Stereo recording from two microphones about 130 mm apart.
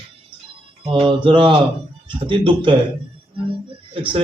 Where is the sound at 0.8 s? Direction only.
40° right (ahead or behind).